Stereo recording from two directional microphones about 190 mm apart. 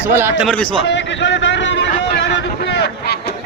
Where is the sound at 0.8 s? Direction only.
70° left (ahead or behind).